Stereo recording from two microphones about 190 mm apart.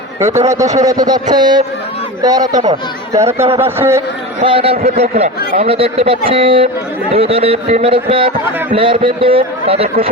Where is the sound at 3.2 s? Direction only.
15° right (ahead or behind).